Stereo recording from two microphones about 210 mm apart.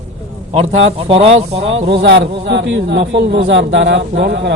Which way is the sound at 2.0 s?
50° right (ahead or behind).